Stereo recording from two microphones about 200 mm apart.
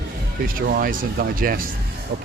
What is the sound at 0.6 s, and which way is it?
Speech, 45° right (ahead or behind).